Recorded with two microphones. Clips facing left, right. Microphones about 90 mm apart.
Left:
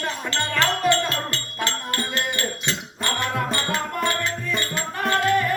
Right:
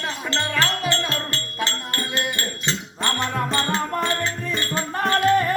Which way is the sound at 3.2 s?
30° right (ahead or behind).